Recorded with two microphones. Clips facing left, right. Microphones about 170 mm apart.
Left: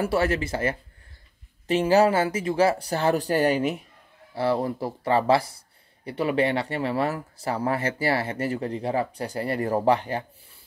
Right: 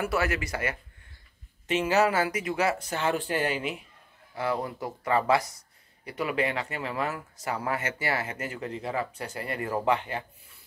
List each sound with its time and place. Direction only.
0.0 s speech: 30° left (ahead or behind)